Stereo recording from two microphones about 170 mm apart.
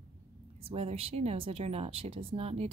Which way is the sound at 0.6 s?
35° right (ahead or behind).